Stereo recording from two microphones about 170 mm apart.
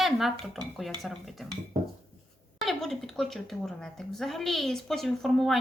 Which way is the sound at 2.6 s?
Centre (ahead or behind).